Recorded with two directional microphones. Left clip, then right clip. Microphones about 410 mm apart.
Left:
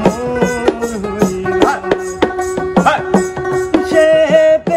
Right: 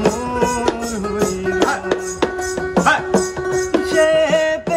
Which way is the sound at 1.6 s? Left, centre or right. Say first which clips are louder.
Left 6 dB; centre.